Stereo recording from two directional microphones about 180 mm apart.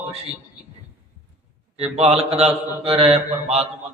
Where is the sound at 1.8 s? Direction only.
35° right (ahead or behind).